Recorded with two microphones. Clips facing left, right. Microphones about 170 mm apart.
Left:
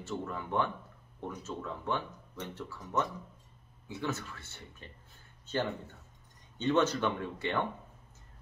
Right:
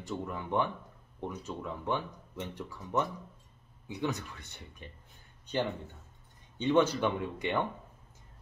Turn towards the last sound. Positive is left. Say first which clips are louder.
# right 2 dB
turn(degrees=-15)  # may be behind; listen again after turning